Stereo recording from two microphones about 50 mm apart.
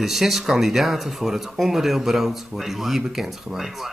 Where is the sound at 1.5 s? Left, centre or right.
Centre.